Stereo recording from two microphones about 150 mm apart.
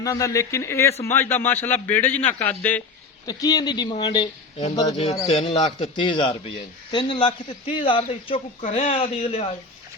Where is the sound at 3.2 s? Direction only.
25° left (ahead or behind).